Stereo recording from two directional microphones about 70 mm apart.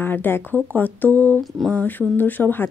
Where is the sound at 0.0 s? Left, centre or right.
Left.